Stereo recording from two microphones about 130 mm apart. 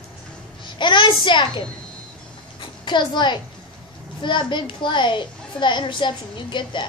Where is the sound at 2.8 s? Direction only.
35° left (ahead or behind).